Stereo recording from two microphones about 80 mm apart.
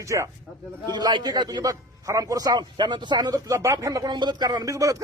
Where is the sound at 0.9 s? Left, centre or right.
Right.